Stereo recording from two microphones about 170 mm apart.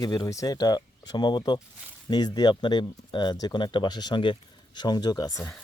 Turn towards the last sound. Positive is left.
turn(degrees=25)  # may be behind; listen again after turning